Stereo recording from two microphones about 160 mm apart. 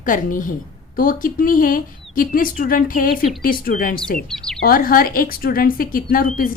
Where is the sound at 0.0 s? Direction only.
55° left (ahead or behind).